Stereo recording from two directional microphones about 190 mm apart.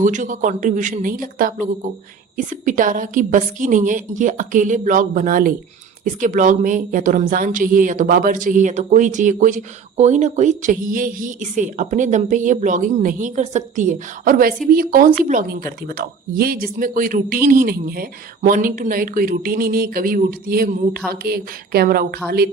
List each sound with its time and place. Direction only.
0.0 s speech: 40° right (ahead or behind)